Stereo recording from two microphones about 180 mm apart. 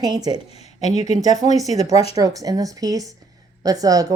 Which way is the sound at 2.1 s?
20° right (ahead or behind).